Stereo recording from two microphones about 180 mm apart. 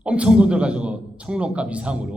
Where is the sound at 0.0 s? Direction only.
5° right (ahead or behind).